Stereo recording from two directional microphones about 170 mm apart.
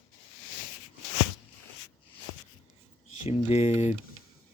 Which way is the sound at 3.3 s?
40° left (ahead or behind).